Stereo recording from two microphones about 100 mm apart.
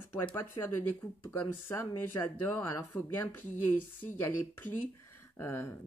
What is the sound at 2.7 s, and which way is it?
Speech, 25° left (ahead or behind).